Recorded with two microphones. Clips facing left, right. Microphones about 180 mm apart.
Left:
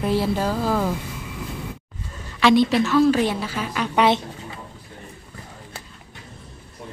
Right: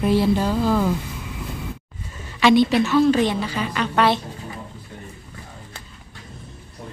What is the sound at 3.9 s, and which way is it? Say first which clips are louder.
Speech: left 1 dB; 20° left (ahead or behind).